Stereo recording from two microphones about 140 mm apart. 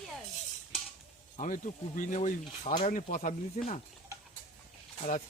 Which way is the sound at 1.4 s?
70° left (ahead or behind).